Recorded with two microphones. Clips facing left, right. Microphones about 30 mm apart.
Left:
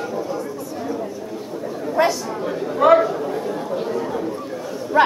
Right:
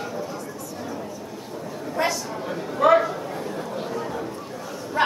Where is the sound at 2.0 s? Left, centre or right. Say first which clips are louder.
Left 6 dB; centre.